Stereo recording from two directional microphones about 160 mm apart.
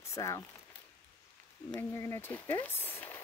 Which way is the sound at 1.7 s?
15° left (ahead or behind).